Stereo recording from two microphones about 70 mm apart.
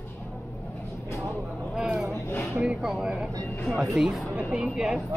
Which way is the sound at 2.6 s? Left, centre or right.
Centre.